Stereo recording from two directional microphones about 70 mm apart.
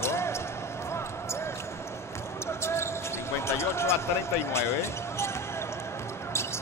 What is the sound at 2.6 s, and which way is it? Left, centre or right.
Basketball bounce, left.